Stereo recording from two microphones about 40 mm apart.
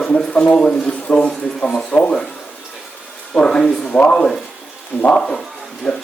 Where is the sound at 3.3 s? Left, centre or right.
Left.